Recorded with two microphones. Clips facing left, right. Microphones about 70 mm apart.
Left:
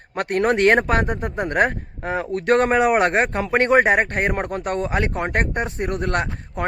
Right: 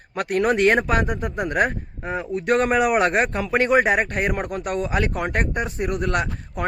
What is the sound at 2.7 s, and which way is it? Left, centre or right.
A man's voice, left.